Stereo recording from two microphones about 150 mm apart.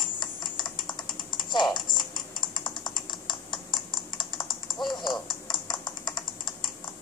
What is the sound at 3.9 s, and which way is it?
Computer keyboard, 30° left (ahead or behind).